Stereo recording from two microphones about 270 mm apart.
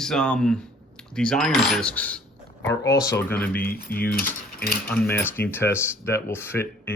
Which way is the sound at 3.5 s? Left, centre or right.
Left.